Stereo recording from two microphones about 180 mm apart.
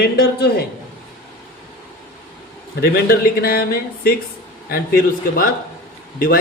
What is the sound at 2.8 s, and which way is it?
Speech, 55° left (ahead or behind).